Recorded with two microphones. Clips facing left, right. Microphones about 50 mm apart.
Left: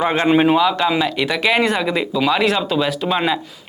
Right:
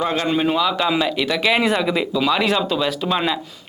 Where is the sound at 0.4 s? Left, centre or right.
Centre.